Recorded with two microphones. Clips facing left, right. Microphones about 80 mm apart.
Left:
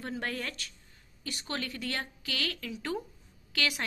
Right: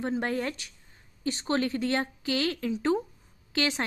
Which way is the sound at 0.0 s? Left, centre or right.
Right.